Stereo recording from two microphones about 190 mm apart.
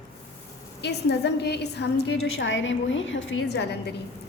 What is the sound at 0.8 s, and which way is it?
A woman's voice, 60° left (ahead or behind).